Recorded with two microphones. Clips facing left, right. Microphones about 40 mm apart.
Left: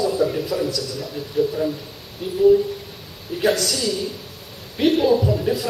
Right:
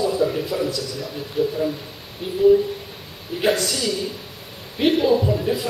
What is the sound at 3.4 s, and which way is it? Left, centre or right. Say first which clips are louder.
Speech: left 1 dB; right.